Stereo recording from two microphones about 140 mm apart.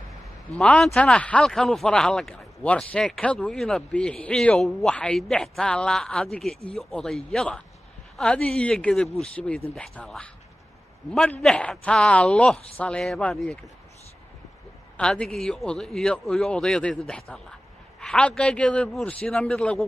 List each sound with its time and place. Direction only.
0.6 s a man's voice: 5° left (ahead or behind)
15.0 s a man's voice: 5° left (ahead or behind)